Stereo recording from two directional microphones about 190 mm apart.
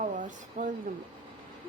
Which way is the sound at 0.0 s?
40° right (ahead or behind).